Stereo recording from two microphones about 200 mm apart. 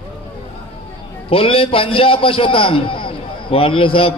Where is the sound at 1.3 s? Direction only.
25° left (ahead or behind).